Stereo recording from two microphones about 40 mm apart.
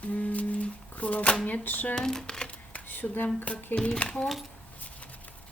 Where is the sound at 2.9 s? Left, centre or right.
Left.